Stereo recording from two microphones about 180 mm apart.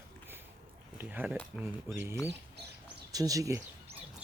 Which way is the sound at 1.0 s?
10° right (ahead or behind).